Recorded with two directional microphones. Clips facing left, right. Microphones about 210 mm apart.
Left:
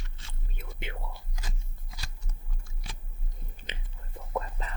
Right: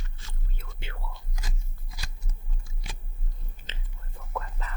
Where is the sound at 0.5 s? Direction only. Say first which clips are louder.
Left 5 dB; 20° left (ahead or behind).